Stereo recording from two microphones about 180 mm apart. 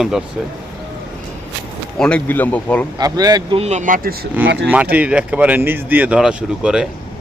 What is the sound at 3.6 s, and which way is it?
Speech, 45° right (ahead or behind).